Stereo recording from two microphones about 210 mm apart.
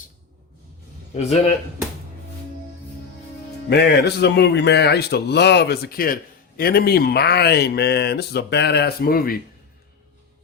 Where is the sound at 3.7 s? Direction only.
50° left (ahead or behind).